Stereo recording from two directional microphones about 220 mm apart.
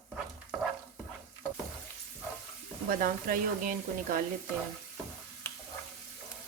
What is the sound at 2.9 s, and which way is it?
Speech, 40° right (ahead or behind).